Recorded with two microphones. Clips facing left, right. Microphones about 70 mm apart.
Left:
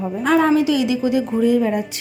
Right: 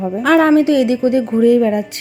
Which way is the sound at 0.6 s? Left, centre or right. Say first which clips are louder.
Right 5 dB; right.